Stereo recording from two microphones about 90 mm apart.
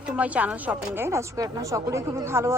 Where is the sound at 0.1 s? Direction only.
15° right (ahead or behind).